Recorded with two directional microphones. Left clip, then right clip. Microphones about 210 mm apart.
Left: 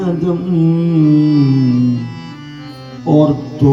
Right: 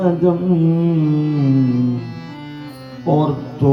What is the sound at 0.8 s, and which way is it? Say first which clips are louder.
Music: left 6 dB; 50° left (ahead or behind).